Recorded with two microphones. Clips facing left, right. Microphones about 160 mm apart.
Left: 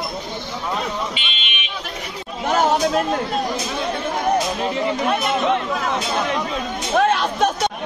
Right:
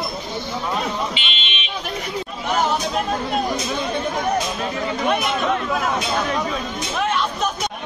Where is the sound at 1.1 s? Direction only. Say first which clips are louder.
Right 1 dB; 25° right (ahead or behind).